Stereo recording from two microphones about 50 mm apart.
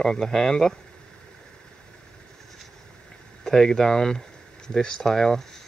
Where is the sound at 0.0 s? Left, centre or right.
Centre.